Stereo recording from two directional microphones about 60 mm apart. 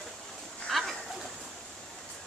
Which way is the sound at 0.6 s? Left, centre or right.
Centre.